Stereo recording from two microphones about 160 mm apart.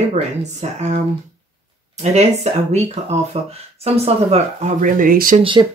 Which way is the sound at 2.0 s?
45° right (ahead or behind).